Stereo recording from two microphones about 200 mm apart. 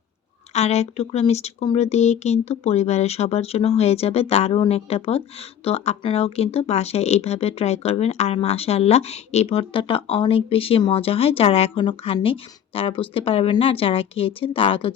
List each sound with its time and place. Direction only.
0.5 s speech: 35° left (ahead or behind)